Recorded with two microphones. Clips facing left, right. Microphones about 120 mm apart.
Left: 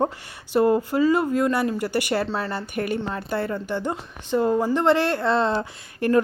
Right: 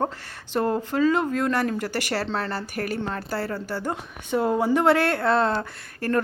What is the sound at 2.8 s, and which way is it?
Speech, 20° left (ahead or behind).